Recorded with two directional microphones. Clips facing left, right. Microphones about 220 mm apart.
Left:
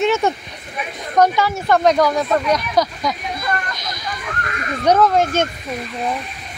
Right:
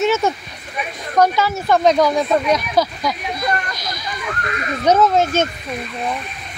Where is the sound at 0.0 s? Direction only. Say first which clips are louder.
Even; 5° right (ahead or behind).